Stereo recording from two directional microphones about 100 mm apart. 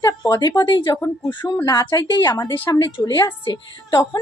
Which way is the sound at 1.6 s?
40° left (ahead or behind).